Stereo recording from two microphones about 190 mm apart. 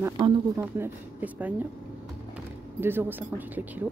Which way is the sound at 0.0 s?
15° right (ahead or behind).